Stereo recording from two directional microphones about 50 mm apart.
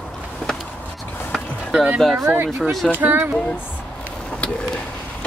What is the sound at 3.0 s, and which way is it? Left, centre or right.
Speech, right.